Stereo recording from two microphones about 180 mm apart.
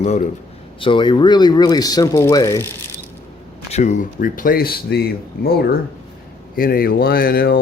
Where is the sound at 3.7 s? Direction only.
40° left (ahead or behind).